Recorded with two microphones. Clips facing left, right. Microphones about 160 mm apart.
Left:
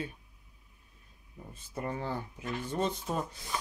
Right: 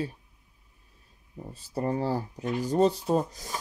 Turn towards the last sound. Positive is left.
turn(degrees=-40)  # may be behind; listen again after turning